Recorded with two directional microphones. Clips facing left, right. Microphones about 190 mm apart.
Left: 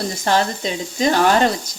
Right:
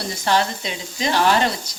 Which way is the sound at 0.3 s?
40° left (ahead or behind).